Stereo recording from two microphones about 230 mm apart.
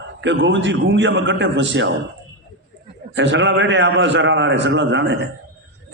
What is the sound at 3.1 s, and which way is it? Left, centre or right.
A man's voice, right.